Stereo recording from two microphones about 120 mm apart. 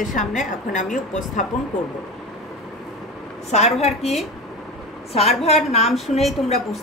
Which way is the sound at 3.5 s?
65° left (ahead or behind).